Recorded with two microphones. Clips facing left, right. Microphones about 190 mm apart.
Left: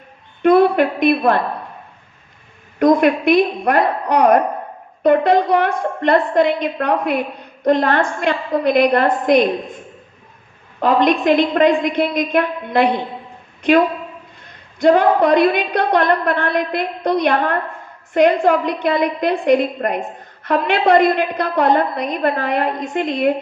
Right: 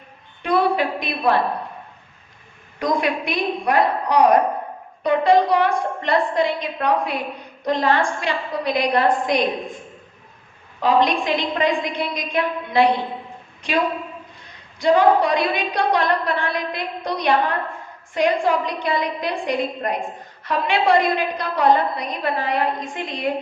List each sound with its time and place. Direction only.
0.4 s a woman's voice: 55° left (ahead or behind)
2.7 s a woman's voice: 55° left (ahead or behind)
10.8 s a woman's voice: 55° left (ahead or behind)
14.8 s a woman's voice: 55° left (ahead or behind)